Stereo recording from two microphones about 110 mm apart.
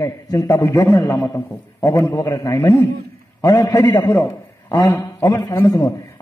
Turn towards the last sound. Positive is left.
turn(degrees=30)  # may be behind; listen again after turning